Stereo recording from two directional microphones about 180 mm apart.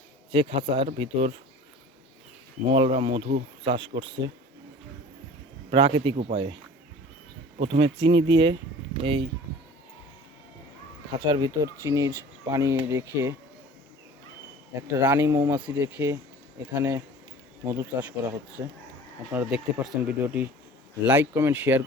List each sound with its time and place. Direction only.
0.3 s speech: 30° right (ahead or behind)
2.6 s speech: 30° right (ahead or behind)
3.7 s speech: 30° right (ahead or behind)
5.7 s speech: 30° right (ahead or behind)
7.6 s speech: 35° right (ahead or behind)
11.3 s speech: 20° right (ahead or behind)
14.8 s speech: 15° right (ahead or behind)